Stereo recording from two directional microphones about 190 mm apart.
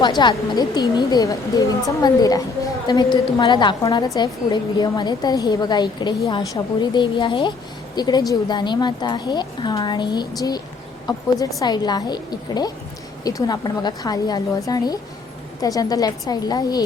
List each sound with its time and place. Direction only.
0.0 s a woman's voice: 25° left (ahead or behind)